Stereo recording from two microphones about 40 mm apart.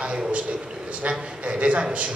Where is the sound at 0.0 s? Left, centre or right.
Right.